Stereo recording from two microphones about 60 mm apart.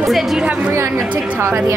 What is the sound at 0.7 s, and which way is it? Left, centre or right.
A woman's voice, right.